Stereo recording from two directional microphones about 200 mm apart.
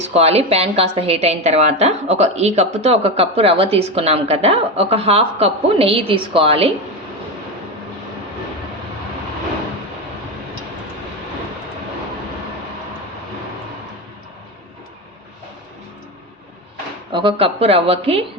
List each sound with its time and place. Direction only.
0.0 s a woman's voice: 30° right (ahead or behind)
17.1 s a woman's voice: 25° right (ahead or behind)